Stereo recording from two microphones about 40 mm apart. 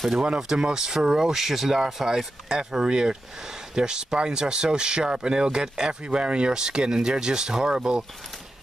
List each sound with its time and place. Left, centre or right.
0.4 s speech: centre